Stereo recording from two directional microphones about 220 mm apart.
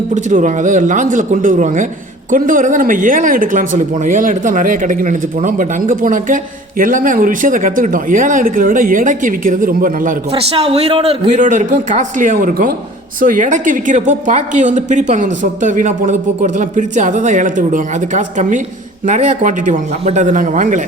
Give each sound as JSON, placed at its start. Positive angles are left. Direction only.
{"t": 0.1, "sound": "speech", "side_deg": -35}
{"t": 10.3, "sound": "speech", "side_deg": -25}